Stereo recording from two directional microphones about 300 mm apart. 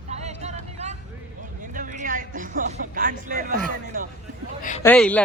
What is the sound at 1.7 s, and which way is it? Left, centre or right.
Speech, right.